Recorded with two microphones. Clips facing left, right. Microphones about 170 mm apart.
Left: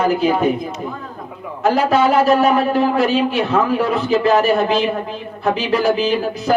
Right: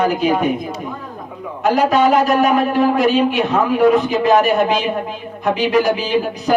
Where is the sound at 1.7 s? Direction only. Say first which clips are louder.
Right 1 dB; 15° right (ahead or behind).